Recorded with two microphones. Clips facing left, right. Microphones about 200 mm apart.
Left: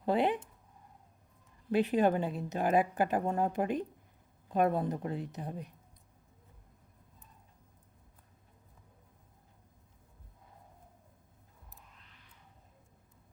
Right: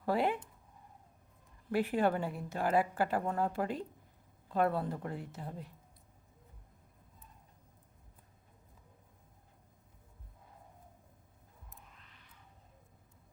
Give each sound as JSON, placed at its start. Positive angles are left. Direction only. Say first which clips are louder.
{"t": 0.0, "sound": "speech", "louder": "left 3 dB", "side_deg": 20}
{"t": 1.7, "sound": "a woman's voice", "louder": "left 3 dB", "side_deg": 20}